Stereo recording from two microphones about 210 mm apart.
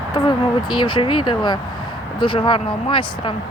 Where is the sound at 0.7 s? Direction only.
20° left (ahead or behind).